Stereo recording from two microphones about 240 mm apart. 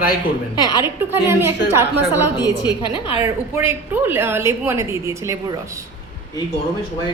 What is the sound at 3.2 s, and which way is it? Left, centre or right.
A woman's voice, centre.